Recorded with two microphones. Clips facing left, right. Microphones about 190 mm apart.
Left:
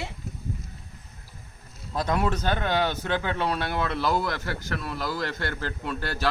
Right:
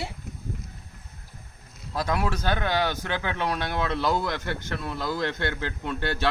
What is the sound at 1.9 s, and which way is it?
A woman's voice, 5° right (ahead or behind).